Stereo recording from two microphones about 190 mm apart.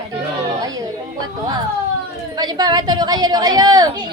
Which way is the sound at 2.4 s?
20° right (ahead or behind).